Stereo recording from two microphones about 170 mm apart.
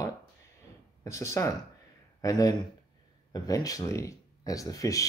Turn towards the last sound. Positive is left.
turn(degrees=20)  # may be behind; listen again after turning